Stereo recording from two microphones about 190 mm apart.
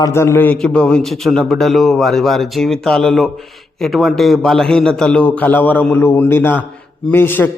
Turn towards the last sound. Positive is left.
turn(degrees=10)  # may be behind; listen again after turning